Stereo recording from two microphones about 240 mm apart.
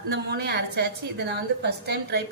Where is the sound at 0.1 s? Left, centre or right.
Right.